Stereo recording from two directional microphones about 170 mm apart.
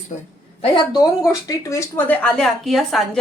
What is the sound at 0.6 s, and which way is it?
Speech, 25° left (ahead or behind).